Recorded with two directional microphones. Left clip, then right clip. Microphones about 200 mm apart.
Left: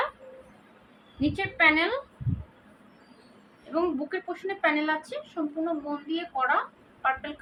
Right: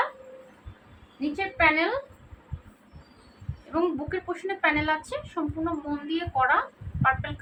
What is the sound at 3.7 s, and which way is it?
A woman's voice, 5° left (ahead or behind).